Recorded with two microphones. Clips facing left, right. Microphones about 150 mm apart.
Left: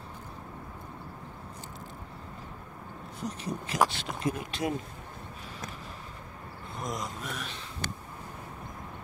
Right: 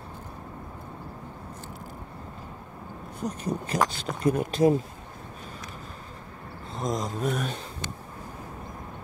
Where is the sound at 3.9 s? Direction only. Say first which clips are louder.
Right 7 dB; 45° right (ahead or behind).